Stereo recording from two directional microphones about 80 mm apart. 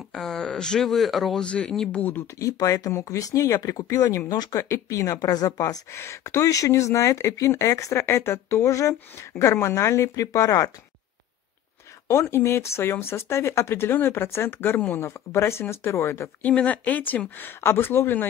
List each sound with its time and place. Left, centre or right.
0.1 s speech: centre
1.4 s speech: centre
2.3 s speech: left
5.9 s speech: left
12.1 s speech: left
16.4 s speech: centre